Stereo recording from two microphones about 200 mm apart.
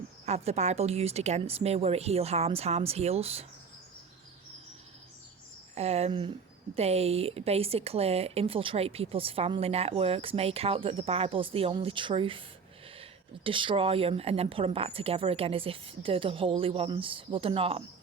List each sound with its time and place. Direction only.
0.3 s speech: 30° right (ahead or behind)
5.7 s speech: 30° right (ahead or behind)